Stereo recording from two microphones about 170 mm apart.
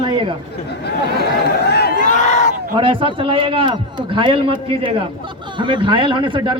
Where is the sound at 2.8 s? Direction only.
30° right (ahead or behind).